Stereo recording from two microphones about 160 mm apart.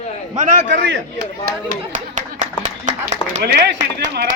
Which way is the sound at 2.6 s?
50° right (ahead or behind).